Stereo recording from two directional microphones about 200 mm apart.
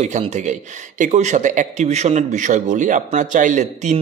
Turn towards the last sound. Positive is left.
turn(degrees=-40)  # may be behind; listen again after turning